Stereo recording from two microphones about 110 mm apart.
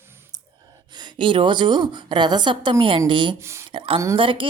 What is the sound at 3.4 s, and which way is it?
Speech, 25° right (ahead or behind).